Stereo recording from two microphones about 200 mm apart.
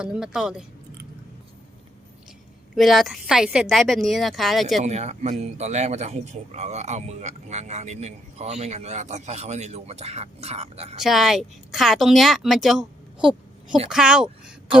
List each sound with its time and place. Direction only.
0.0 s speech: 5° right (ahead or behind)
2.7 s speech: centre (ahead or behind)
4.8 s a man's voice: 35° right (ahead or behind)
11.0 s speech: centre (ahead or behind)